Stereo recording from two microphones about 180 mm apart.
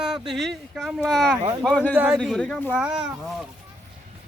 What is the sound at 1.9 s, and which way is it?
Speech, 10° right (ahead or behind).